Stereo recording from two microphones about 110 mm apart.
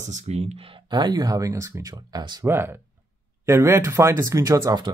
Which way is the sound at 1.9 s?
45° right (ahead or behind).